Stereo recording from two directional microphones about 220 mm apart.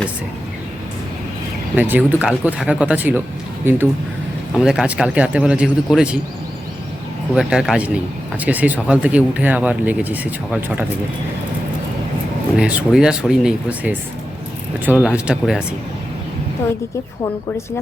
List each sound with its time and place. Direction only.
1.7 s speech: 5° right (ahead or behind)
7.3 s speech: 5° right (ahead or behind)
12.5 s speech: 5° right (ahead or behind)